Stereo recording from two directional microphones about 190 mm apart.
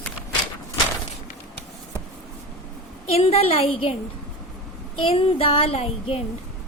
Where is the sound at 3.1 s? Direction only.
35° left (ahead or behind).